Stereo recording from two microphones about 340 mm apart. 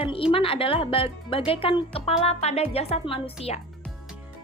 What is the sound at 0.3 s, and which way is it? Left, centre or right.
Speech, centre.